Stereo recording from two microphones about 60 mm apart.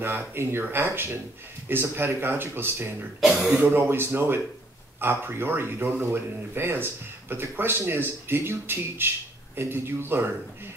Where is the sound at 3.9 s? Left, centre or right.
Right.